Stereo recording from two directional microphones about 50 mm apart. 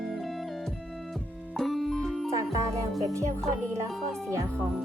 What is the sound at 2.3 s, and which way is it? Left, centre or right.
Music, right.